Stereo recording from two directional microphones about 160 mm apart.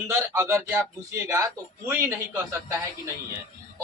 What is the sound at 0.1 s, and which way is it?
A man's voice, 15° right (ahead or behind).